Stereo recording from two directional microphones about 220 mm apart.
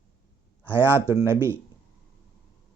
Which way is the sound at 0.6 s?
10° right (ahead or behind).